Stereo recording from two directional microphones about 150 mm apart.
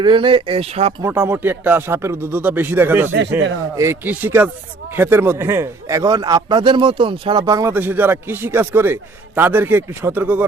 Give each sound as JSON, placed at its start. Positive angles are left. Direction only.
{"t": 0.0, "sound": "speech", "side_deg": -30}
{"t": 1.0, "sound": "a man's voice", "side_deg": -15}
{"t": 7.7, "sound": "speech", "side_deg": -15}